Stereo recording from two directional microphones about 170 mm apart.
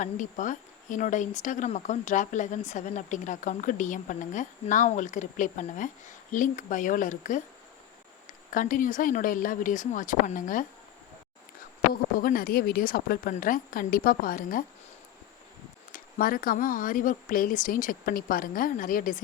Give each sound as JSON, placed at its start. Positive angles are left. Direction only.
{"t": 0.0, "sound": "speech", "side_deg": 50}
{"t": 8.5, "sound": "speech", "side_deg": 50}
{"t": 12.2, "sound": "speech", "side_deg": 60}
{"t": 15.9, "sound": "speech", "side_deg": 55}